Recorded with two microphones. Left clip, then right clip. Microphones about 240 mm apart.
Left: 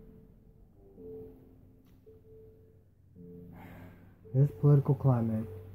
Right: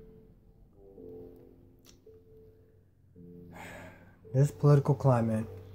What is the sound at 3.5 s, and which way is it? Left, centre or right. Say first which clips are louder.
Gasp: right 6 dB; centre.